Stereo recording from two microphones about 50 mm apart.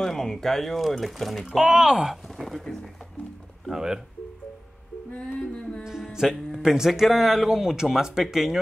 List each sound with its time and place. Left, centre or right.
0.0 s speech: centre
1.5 s speech: centre
2.2 s speech: centre
3.6 s speech: centre
5.2 s music: centre
5.9 s speech: centre